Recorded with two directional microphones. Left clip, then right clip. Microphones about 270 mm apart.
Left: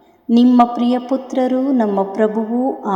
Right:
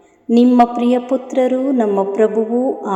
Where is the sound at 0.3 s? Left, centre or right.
Left.